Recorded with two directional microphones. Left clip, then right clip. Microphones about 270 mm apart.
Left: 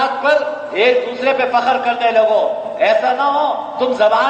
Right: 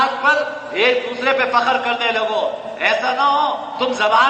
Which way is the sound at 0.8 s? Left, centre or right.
Right.